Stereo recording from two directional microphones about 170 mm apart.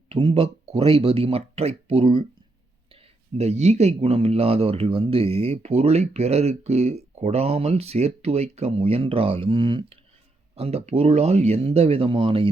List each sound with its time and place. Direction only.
0.1 s speech: 35° right (ahead or behind)